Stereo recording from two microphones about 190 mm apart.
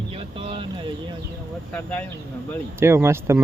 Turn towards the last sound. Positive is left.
turn(degrees=-15)  # may be behind; listen again after turning